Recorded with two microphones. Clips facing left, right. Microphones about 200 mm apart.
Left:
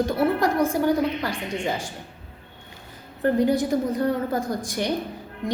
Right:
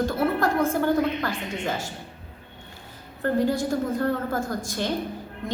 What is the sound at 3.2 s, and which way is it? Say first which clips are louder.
A woman's voice: left 3 dB; 20° left (ahead or behind).